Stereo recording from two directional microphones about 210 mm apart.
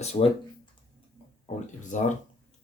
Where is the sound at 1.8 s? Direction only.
35° left (ahead or behind).